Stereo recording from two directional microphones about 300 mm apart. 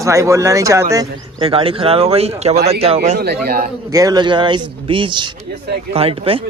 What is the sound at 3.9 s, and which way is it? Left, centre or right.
Speech, centre.